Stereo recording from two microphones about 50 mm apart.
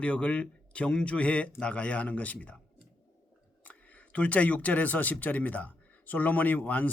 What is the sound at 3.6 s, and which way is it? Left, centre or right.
Speech, left.